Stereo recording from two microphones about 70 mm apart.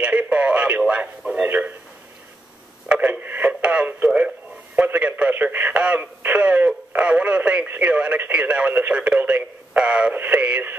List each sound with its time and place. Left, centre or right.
0.0 s radio: centre
1.3 s a man's voice: right
2.9 s radio: right
3.4 s radio: centre
4.7 s a man's voice: right
7.6 s a man's voice: right
7.9 s a man's voice: centre